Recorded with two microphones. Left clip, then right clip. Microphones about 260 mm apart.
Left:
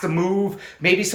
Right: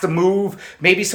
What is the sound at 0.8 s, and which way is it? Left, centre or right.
Speech, centre.